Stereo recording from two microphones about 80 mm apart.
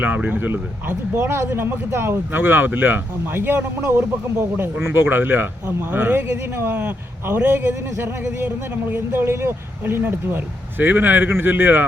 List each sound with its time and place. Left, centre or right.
0.0 s a man's voice: right